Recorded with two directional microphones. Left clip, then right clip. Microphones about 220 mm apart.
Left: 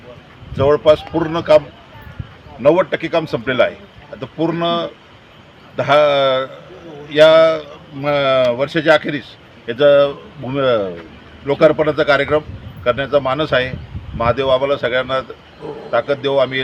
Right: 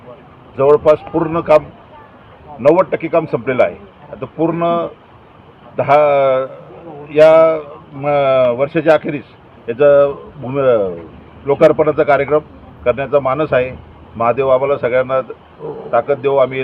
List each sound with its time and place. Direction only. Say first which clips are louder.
0.5 s speech: right 2 dB; 15° left (ahead or behind)